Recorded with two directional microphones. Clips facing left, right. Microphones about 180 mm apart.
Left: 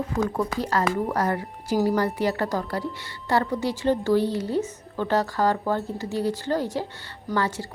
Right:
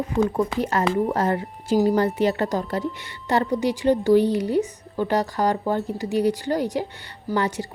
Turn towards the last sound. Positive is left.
turn(degrees=-15)  # may be behind; listen again after turning